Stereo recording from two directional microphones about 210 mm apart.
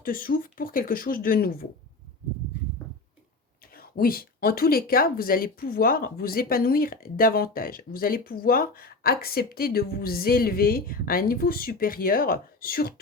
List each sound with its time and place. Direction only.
0.0 s speech: 40° left (ahead or behind)
3.8 s speech: 45° left (ahead or behind)